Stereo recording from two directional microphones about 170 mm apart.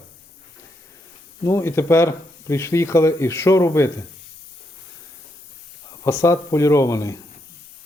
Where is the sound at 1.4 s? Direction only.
15° left (ahead or behind).